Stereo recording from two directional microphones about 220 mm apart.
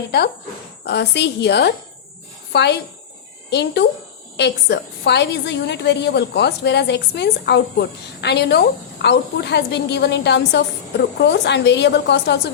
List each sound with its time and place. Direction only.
0.9 s a woman's voice: 50° left (ahead or behind)